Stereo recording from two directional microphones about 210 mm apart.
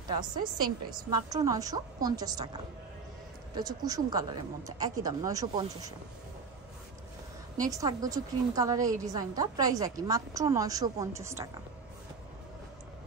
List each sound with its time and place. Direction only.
0.1 s a woman's voice: 20° right (ahead or behind)
3.5 s a woman's voice: 20° right (ahead or behind)
7.7 s a woman's voice: 15° right (ahead or behind)